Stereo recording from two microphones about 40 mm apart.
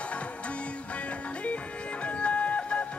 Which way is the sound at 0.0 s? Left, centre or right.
Left.